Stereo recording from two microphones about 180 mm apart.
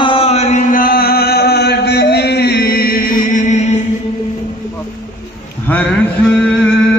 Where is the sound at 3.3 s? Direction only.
40° left (ahead or behind).